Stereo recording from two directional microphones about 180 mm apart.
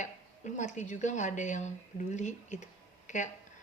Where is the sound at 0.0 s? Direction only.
40° left (ahead or behind).